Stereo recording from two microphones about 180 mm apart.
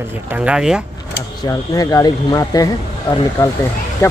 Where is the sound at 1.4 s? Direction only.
20° left (ahead or behind).